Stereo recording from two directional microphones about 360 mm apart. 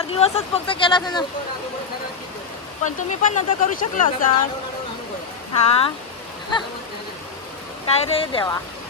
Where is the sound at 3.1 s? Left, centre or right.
Left.